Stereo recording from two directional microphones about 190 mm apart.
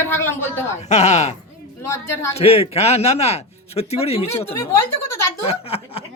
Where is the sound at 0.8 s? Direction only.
35° left (ahead or behind).